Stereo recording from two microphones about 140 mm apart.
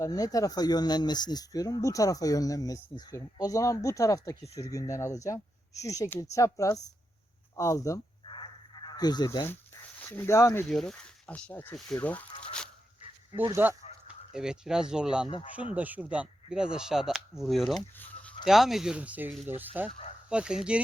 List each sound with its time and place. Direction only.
0.0 s speech: 25° left (ahead or behind)
8.2 s a sound: 35° left (ahead or behind)
10.0 s speech: 15° left (ahead or behind)
10.7 s speech: centre (ahead or behind)
12.0 s a sound: 10° left (ahead or behind)
13.5 s speech: 15° right (ahead or behind)
17.9 s a sound: 10° left (ahead or behind)
18.4 s speech: centre (ahead or behind)
19.9 s speech: 55° left (ahead or behind)
20.3 s speech: 5° right (ahead or behind)